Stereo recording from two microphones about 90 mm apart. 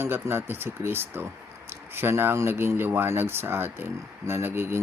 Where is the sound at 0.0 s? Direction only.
25° right (ahead or behind).